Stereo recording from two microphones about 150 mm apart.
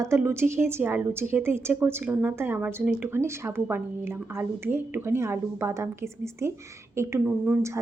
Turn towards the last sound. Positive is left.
turn(degrees=-15)  # may be behind; listen again after turning